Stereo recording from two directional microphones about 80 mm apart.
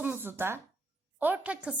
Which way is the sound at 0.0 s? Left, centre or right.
Right.